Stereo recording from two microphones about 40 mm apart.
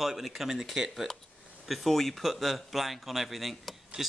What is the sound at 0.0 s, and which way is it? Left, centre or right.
Speech, centre.